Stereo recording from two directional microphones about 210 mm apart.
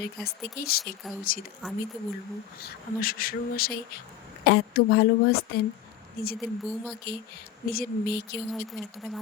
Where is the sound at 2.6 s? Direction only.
45° left (ahead or behind).